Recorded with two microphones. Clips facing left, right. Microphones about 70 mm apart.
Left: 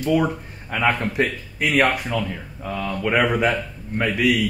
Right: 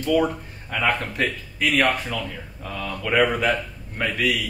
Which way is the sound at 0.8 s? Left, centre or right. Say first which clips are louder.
Left 3 dB; left.